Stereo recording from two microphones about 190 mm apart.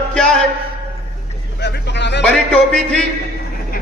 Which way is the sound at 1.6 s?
65° left (ahead or behind).